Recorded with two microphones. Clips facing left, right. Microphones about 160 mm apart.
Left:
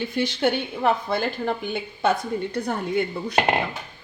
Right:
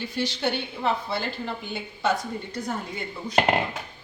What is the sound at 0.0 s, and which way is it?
A woman's voice, 55° left (ahead or behind).